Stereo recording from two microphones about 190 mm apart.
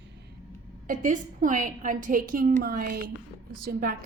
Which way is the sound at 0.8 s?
40° right (ahead or behind).